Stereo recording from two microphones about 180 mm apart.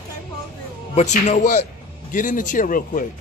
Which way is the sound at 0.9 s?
40° left (ahead or behind).